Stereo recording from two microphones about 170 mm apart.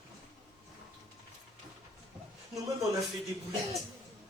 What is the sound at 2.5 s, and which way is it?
Speech, 20° right (ahead or behind).